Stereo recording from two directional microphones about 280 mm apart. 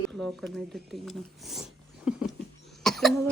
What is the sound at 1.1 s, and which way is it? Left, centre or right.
Speech, centre.